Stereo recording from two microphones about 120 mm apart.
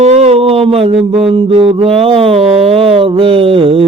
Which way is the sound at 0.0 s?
65° right (ahead or behind).